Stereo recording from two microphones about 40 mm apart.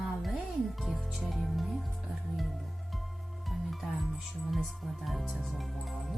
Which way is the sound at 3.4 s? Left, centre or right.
Centre.